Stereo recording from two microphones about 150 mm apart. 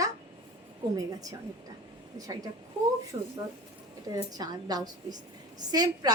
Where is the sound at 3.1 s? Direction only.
25° right (ahead or behind).